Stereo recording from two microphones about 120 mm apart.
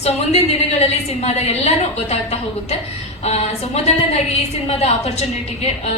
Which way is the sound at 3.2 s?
60° left (ahead or behind).